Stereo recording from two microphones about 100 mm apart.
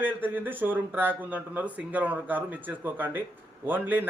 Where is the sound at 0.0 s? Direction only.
20° right (ahead or behind).